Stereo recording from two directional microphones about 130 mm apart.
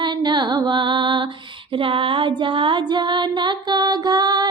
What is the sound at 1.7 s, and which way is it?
Female singing, 40° right (ahead or behind).